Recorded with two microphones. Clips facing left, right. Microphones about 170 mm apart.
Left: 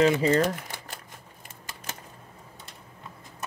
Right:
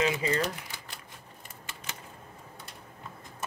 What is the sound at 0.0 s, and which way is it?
Speech, 45° left (ahead or behind).